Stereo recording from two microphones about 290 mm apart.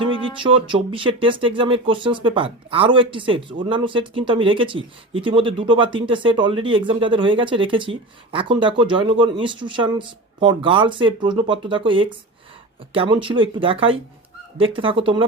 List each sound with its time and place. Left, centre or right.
0.3 s speech: centre